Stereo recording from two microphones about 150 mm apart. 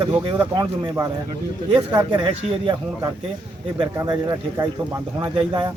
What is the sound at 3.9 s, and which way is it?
Speech, 25° right (ahead or behind).